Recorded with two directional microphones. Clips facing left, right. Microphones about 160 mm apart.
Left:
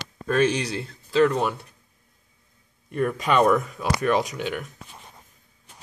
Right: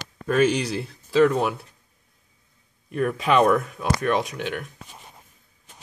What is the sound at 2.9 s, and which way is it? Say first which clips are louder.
Speech: right 1 dB; 5° right (ahead or behind).